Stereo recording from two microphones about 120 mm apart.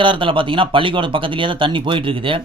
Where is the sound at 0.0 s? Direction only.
45° right (ahead or behind).